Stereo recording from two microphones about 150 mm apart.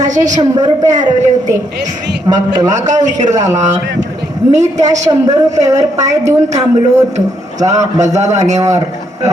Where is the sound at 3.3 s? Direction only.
25° right (ahead or behind).